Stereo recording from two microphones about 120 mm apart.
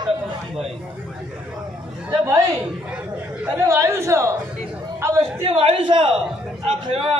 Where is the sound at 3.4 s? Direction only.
25° right (ahead or behind).